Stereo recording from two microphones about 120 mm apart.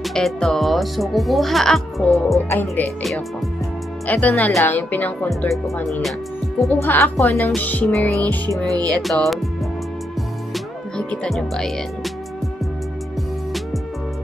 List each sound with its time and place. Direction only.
0.0 s speech: 5° left (ahead or behind)
2.5 s speech: 20° left (ahead or behind)
3.0 s speech: centre (ahead or behind)
4.1 s speech: 10° left (ahead or behind)
6.7 s speech: 15° left (ahead or behind)
8.5 s music: 30° right (ahead or behind)
9.0 s speech: centre (ahead or behind)
10.5 s music: 5° left (ahead or behind)